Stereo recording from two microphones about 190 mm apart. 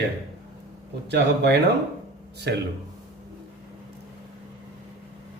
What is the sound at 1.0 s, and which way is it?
A man's voice, 60° right (ahead or behind).